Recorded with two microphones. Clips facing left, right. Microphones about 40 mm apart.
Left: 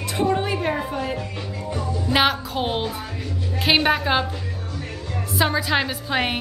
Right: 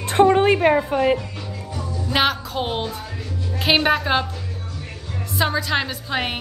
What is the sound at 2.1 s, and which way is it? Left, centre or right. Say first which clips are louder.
A woman's voice: even; centre.